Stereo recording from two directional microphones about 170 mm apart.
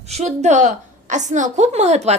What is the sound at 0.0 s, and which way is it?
A woman's voice, 40° right (ahead or behind).